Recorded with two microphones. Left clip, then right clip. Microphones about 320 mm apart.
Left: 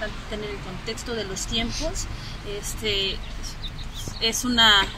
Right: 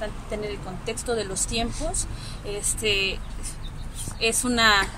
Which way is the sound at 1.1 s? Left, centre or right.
Centre.